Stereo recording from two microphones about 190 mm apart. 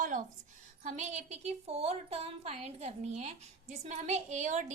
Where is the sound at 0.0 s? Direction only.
45° right (ahead or behind).